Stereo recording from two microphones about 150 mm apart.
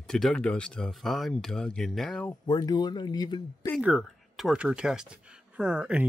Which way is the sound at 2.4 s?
25° left (ahead or behind).